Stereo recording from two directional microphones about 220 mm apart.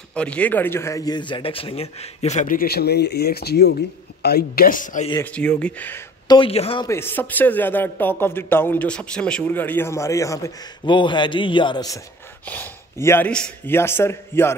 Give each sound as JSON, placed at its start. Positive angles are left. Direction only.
{"t": 0.1, "sound": "a man's voice", "side_deg": 5}
{"t": 5.2, "sound": "a man's voice", "side_deg": 5}
{"t": 6.2, "sound": "speech", "side_deg": 20}
{"t": 6.9, "sound": "a man's voice", "side_deg": 10}